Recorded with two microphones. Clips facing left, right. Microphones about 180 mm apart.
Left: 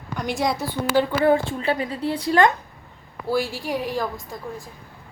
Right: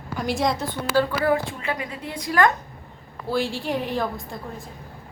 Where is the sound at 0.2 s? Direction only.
Centre (ahead or behind).